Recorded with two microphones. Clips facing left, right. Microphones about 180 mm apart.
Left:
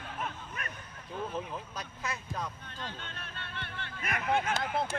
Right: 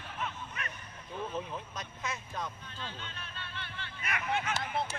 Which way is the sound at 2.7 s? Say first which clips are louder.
Left 1 dB; 55° left (ahead or behind).